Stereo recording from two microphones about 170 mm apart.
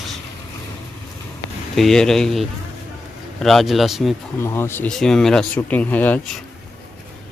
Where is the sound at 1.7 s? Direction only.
5° left (ahead or behind).